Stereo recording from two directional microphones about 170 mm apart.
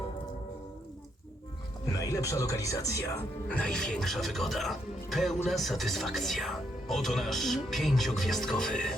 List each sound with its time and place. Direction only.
1.9 s speech: 20° left (ahead or behind)
3.5 s speech: 5° left (ahead or behind)